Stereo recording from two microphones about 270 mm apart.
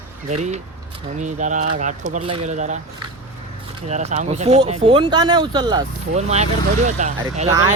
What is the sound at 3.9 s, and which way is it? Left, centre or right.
Speech, right.